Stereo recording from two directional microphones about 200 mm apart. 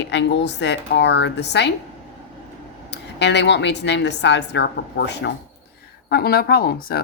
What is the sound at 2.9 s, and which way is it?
Speech, 60° left (ahead or behind).